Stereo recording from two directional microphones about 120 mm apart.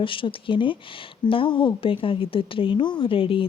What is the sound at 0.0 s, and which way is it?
Speech, 45° left (ahead or behind).